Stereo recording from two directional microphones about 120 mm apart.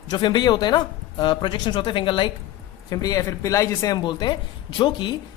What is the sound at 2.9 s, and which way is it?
Speech, 30° left (ahead or behind).